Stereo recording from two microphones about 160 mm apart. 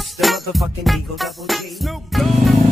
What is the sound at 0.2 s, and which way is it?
Music, centre (ahead or behind).